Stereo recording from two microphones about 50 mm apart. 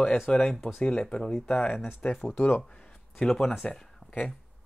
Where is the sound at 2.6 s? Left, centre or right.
Centre.